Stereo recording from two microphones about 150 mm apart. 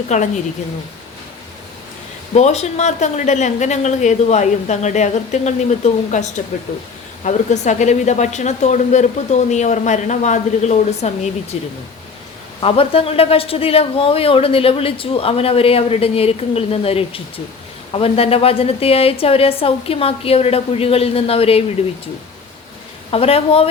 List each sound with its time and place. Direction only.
0.1 s speech: 50° left (ahead or behind)
2.3 s speech: 45° left (ahead or behind)
12.6 s speech: 40° left (ahead or behind)
23.1 s speech: 40° left (ahead or behind)